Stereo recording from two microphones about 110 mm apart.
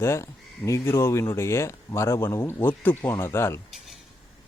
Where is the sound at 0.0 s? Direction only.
25° left (ahead or behind).